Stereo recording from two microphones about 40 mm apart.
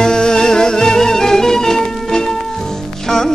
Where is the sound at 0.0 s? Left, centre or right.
Centre.